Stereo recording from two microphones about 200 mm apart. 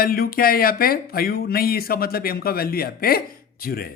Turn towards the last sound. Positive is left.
turn(degrees=50)  # may be behind; listen again after turning